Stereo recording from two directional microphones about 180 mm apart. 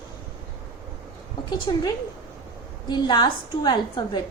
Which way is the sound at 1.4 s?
25° left (ahead or behind).